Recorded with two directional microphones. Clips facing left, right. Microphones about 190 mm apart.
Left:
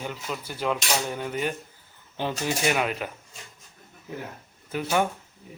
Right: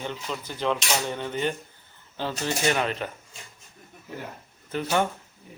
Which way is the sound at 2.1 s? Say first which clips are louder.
Left 1 dB; 15° left (ahead or behind).